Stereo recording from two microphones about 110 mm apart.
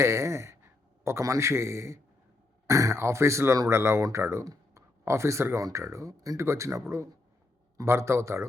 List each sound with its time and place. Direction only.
0.0 s speech: 25° right (ahead or behind)